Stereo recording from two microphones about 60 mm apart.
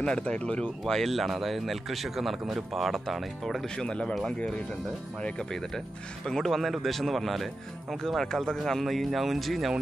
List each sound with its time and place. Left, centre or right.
0.0 s speech: centre
3.6 s speech: centre